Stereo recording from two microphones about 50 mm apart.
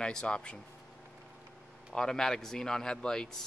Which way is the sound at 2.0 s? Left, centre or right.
Centre.